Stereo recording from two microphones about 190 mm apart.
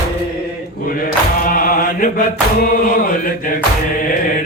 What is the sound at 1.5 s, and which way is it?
Mantra, 50° left (ahead or behind).